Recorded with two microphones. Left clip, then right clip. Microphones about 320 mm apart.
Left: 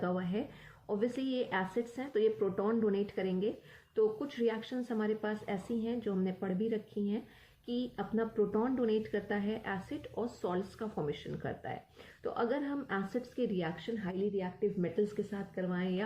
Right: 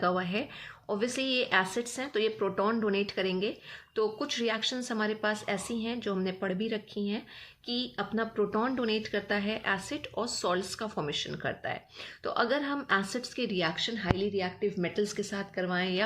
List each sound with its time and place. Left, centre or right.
0.0 s speech: right